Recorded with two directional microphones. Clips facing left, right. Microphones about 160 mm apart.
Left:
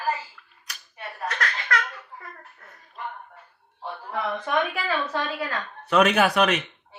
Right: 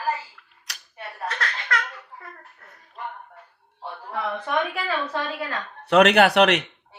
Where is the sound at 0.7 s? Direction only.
75° right (ahead or behind).